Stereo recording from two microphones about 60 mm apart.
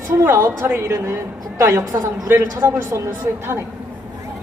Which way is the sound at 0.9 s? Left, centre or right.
Right.